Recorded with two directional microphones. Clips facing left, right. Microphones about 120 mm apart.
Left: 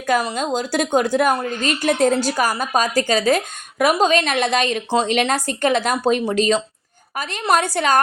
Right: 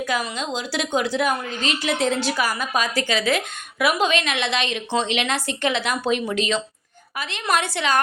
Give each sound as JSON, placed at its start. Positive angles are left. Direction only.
{"t": 0.0, "sound": "a woman's voice", "side_deg": 45}